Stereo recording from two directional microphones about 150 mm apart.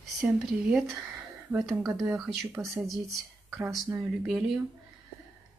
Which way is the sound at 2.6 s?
15° right (ahead or behind).